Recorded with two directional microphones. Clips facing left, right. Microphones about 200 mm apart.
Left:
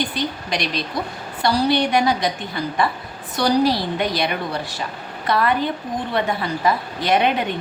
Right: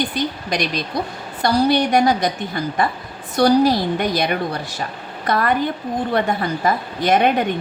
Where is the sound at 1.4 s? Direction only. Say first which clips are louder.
Right 2 dB; 45° right (ahead or behind).